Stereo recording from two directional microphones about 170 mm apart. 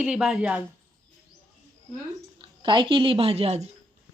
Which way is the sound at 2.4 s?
30° right (ahead or behind).